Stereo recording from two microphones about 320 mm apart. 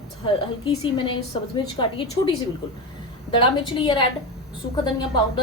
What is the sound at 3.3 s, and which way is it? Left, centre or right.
Speech, centre.